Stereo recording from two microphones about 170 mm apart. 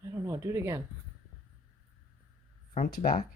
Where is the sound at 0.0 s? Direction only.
20° right (ahead or behind).